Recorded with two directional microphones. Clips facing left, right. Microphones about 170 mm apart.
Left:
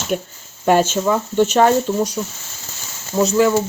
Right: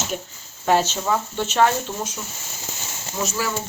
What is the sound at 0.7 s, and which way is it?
Speech, 50° left (ahead or behind).